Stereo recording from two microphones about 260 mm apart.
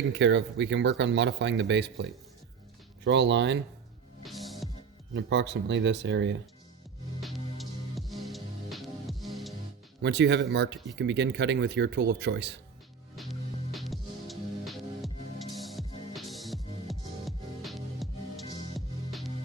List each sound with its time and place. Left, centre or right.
0.1 s speech: right
4.2 s music: centre
5.1 s speech: right
7.2 s music: centre
10.0 s speech: right
13.7 s music: centre